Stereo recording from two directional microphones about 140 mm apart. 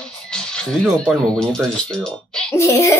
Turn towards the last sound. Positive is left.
turn(degrees=20)  # may be behind; listen again after turning